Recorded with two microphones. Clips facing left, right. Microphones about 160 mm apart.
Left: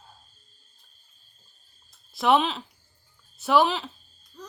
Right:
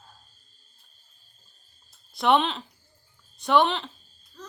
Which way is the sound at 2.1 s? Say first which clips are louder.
Even; centre (ahead or behind).